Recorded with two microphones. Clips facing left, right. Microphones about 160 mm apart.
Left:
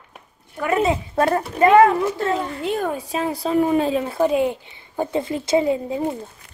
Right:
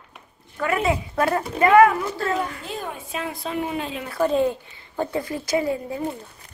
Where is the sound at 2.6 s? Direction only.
50° left (ahead or behind).